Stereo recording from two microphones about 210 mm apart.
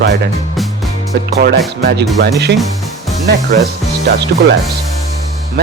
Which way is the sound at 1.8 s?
50° right (ahead or behind).